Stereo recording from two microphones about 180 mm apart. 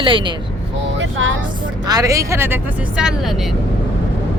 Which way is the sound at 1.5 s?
25° right (ahead or behind).